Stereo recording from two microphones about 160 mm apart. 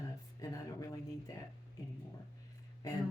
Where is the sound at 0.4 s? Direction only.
20° left (ahead or behind).